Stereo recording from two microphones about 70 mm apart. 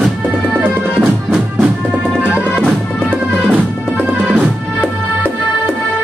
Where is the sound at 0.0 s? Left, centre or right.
Centre.